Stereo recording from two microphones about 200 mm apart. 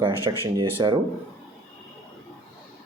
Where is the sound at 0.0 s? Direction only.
25° right (ahead or behind).